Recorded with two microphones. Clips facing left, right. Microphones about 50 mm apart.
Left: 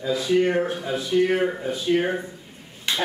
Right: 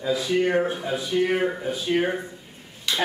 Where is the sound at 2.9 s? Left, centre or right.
Left.